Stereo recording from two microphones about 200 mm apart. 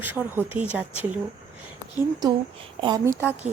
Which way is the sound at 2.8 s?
20° right (ahead or behind).